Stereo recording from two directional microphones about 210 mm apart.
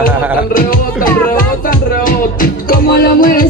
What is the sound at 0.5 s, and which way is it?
Music, 45° left (ahead or behind).